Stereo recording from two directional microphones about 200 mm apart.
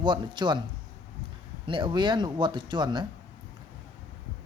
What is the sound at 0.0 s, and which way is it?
Speech, 25° right (ahead or behind).